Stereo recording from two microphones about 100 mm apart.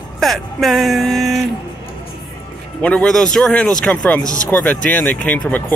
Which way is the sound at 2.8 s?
5° left (ahead or behind).